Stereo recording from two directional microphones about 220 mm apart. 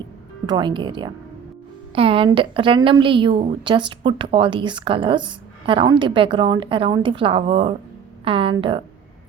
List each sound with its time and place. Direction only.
0.4 s a woman's voice: 20° right (ahead or behind)